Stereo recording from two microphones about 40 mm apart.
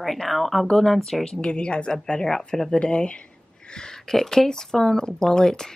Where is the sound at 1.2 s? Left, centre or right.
Left.